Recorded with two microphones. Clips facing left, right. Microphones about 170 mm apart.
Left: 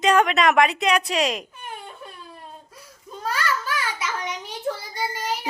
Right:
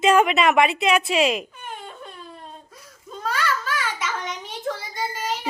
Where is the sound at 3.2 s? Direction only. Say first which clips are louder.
Right 1 dB; 10° left (ahead or behind).